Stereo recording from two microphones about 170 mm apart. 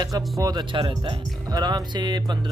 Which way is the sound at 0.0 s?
20° right (ahead or behind).